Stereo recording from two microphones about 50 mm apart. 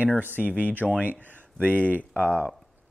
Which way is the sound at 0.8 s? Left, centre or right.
Centre.